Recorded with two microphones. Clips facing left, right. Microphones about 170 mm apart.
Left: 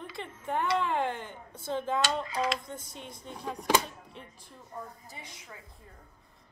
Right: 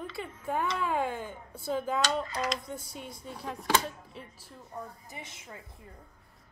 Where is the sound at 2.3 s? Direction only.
Centre (ahead or behind).